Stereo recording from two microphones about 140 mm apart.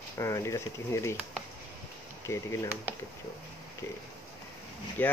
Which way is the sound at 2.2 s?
20° left (ahead or behind).